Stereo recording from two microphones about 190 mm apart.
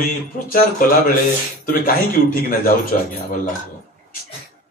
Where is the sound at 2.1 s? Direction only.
50° left (ahead or behind).